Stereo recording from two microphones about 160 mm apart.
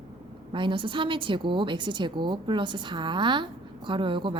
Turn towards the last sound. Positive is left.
turn(degrees=-30)  # may be behind; listen again after turning